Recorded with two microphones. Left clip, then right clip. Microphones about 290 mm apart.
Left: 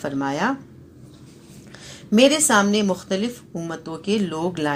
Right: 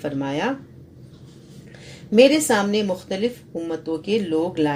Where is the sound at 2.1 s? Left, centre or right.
Left.